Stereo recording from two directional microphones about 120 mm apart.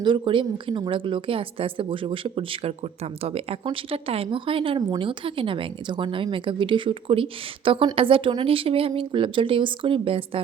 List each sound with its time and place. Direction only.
0.0 s a woman's voice: 45° right (ahead or behind)